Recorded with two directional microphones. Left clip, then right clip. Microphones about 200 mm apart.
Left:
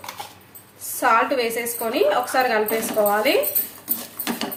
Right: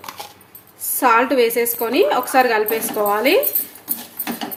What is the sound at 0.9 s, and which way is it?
A woman's voice, 55° right (ahead or behind).